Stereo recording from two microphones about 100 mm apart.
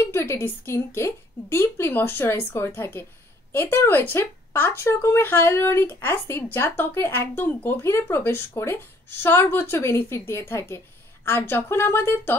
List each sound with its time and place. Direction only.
0.1 s speech: 25° left (ahead or behind)